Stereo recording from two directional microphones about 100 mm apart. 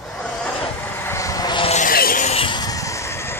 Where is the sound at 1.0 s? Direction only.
30° left (ahead or behind).